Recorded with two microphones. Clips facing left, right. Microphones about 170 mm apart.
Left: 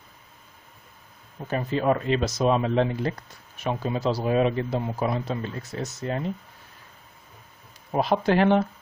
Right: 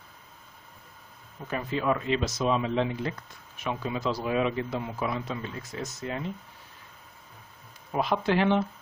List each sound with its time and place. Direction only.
1.5 s speech: 35° left (ahead or behind)
7.9 s speech: 35° left (ahead or behind)